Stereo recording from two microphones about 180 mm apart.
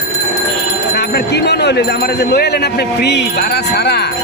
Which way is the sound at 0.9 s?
65° left (ahead or behind).